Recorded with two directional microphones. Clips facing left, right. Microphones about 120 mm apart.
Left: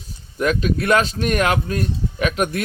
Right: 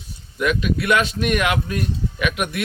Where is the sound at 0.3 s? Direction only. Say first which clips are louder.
Left 1 dB; 35° left (ahead or behind).